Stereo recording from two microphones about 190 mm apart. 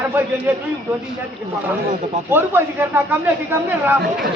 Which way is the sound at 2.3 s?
10° right (ahead or behind).